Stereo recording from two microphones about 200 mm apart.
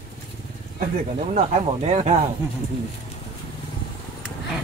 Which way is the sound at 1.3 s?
35° right (ahead or behind).